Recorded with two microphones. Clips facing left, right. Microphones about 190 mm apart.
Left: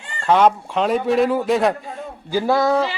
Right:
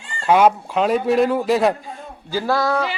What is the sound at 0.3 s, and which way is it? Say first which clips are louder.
Speech: right 1 dB; 10° right (ahead or behind).